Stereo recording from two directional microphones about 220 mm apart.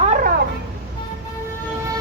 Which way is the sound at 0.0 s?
35° right (ahead or behind).